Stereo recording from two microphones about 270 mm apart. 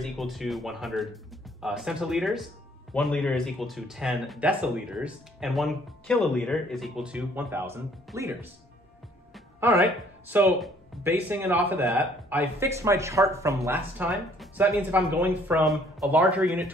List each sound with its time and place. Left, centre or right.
0.0 s speech: centre